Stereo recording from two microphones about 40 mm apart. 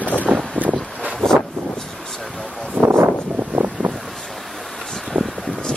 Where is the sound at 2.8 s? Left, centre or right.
Right.